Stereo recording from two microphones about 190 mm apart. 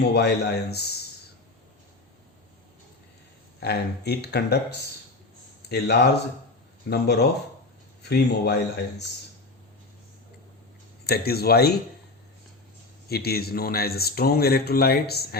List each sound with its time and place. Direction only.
0.0 s speech: 60° left (ahead or behind)
3.6 s speech: 60° left (ahead or behind)
5.6 s speech: 60° left (ahead or behind)
11.0 s speech: 55° left (ahead or behind)
13.1 s speech: 55° left (ahead or behind)